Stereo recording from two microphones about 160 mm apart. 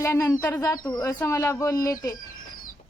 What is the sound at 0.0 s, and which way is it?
Speech, 15° left (ahead or behind).